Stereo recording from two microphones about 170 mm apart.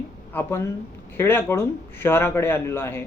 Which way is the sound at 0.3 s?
15° left (ahead or behind).